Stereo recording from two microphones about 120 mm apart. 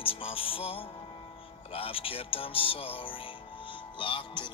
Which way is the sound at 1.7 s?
50° left (ahead or behind).